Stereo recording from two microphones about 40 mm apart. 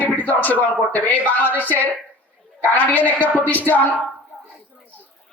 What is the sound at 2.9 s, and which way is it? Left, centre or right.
Speech, left.